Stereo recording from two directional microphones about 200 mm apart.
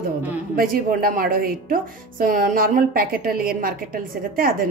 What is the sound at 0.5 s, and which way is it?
A woman's voice, 45° right (ahead or behind).